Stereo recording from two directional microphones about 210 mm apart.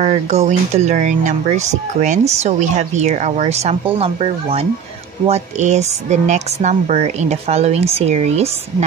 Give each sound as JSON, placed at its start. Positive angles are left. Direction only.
{"t": 0.0, "sound": "speech", "side_deg": -35}